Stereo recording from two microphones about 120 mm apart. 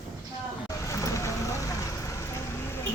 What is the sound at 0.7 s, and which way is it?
Vehicle, 25° left (ahead or behind).